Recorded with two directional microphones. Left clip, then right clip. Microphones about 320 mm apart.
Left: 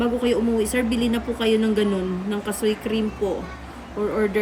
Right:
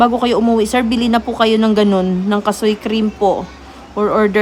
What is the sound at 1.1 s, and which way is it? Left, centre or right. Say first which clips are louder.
Speech: right 10 dB; right.